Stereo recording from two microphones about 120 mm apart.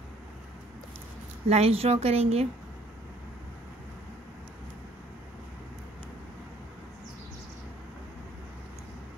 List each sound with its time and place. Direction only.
1.5 s speech: 55° right (ahead or behind)